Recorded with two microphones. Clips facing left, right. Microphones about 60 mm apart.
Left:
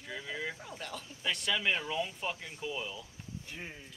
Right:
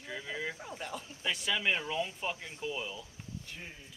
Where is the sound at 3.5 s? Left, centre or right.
Centre.